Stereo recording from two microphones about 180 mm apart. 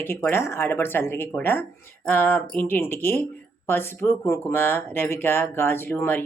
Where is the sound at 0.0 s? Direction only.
10° left (ahead or behind).